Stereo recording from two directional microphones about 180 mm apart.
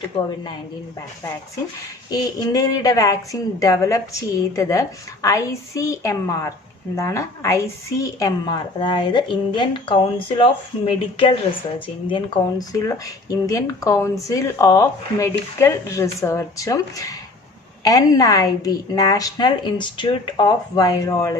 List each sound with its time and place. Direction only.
0.1 s a woman's voice: 30° left (ahead or behind)
2.0 s a woman's voice: 20° left (ahead or behind)